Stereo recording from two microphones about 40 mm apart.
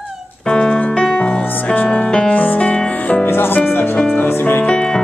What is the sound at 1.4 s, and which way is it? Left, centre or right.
Music, left.